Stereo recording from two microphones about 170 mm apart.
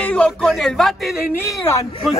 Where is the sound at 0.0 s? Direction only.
5° left (ahead or behind).